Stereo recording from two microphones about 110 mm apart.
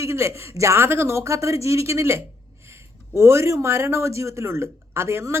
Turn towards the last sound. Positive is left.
turn(degrees=-25)  # may be behind; listen again after turning